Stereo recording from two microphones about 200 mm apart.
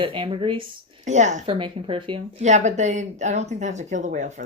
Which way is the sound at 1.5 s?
25° right (ahead or behind).